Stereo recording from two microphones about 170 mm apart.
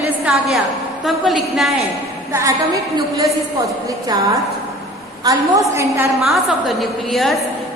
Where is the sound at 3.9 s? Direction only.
20° right (ahead or behind).